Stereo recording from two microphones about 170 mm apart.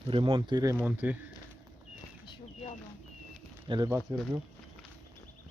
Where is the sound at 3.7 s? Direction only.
30° right (ahead or behind).